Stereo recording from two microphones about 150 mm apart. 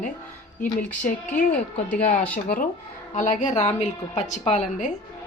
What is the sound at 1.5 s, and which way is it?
Speech, 60° left (ahead or behind).